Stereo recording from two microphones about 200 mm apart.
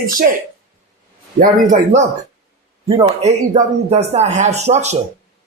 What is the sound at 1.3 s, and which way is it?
Speech, 40° right (ahead or behind).